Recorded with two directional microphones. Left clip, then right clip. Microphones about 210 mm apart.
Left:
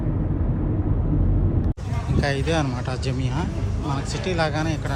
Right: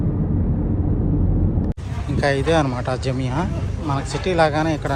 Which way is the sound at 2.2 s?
10° left (ahead or behind).